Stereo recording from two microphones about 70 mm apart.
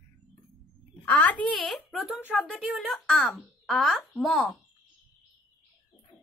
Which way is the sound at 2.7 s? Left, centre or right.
Centre.